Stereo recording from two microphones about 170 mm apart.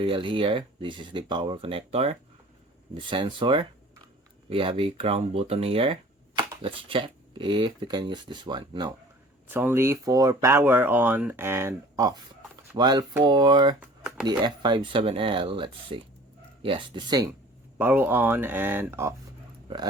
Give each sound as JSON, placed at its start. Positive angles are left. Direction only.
{"t": 0.0, "sound": "speech", "side_deg": -30}
{"t": 9.5, "sound": "speech", "side_deg": -10}
{"t": 13.7, "sound": "a sound", "side_deg": -5}
{"t": 14.3, "sound": "speech", "side_deg": -25}
{"t": 17.7, "sound": "speech", "side_deg": -10}